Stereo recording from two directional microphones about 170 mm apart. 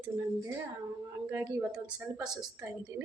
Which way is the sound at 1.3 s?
15° right (ahead or behind).